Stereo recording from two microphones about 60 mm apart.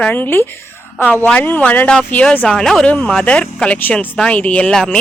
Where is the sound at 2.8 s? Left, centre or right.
Left.